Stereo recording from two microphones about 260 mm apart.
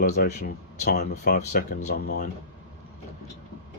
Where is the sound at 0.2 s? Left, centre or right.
Left.